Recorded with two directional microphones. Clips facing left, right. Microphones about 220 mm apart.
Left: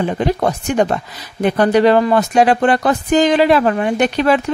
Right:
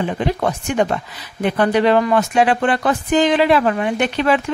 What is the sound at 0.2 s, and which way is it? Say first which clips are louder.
Speech: left 3 dB; 40° left (ahead or behind).